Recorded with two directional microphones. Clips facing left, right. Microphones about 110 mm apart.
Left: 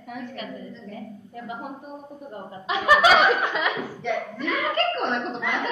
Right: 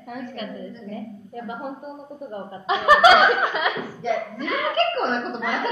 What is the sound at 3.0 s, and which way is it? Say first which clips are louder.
Speech: right 3 dB; 5° right (ahead or behind).